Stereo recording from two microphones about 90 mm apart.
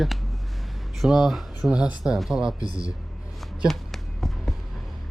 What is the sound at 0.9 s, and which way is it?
Speech, centre (ahead or behind).